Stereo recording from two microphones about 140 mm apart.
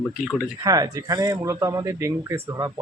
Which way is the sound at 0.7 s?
25° right (ahead or behind).